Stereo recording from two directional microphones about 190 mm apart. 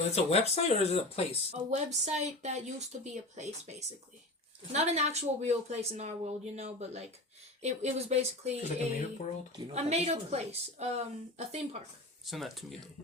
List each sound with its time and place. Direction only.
0.3 s speech: 35° left (ahead or behind)
1.5 s speech: 35° right (ahead or behind)
12.2 s speech: centre (ahead or behind)